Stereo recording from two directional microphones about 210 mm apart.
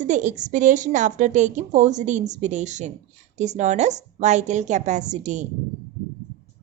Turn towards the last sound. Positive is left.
turn(degrees=-35)  # may be behind; listen again after turning